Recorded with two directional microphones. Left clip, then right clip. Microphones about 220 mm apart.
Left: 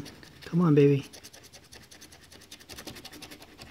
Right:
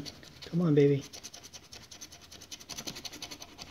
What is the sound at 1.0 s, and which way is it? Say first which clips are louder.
Scratch: right 1 dB; 5° left (ahead or behind).